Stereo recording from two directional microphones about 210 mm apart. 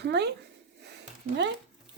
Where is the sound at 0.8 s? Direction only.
55° right (ahead or behind).